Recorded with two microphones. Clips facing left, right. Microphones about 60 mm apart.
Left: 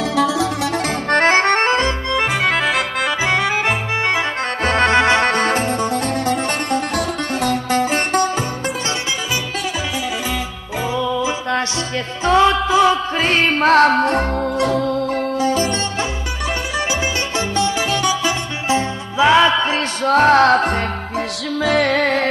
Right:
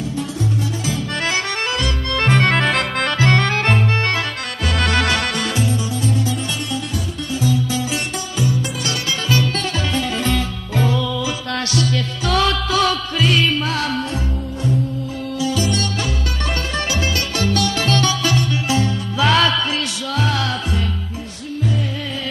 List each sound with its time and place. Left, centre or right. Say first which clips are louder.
0.1 s music: left 8 dB; left
0.8 s accordion: left 10 dB; left
2.1 s accordion: right 3 dB; centre
4.6 s music: left 5 dB; left
10.2 s music: right 2 dB; centre
13.2 s music: left 1 dB; left
14.6 s music: left 2 dB; left
15.3 s music: even; left
17.4 s music: left 1 dB; left
18.7 s music: left 1 dB; left
20.1 s music: left 12 dB; left
21.6 s music: left 9 dB; left